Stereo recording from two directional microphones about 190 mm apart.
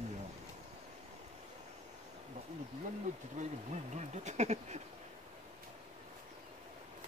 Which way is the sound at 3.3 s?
40° right (ahead or behind).